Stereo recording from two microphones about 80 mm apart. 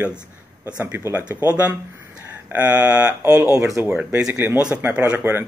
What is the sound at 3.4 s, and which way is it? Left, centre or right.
Speech, right.